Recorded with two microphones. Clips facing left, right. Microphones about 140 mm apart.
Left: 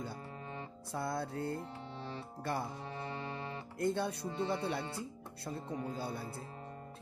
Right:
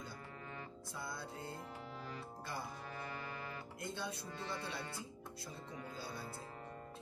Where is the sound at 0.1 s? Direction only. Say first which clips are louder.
Left 5 dB; 25° left (ahead or behind).